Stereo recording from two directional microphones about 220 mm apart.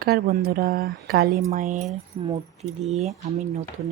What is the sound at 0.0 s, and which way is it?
Speech, 45° right (ahead or behind).